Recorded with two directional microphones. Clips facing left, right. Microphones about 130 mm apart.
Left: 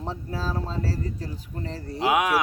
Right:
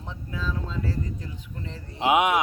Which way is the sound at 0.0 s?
35° left (ahead or behind).